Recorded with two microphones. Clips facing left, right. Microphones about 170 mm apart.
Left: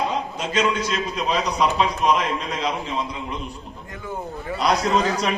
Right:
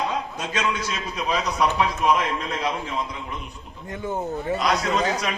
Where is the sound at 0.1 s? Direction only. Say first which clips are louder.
Left 3 dB; 10° left (ahead or behind).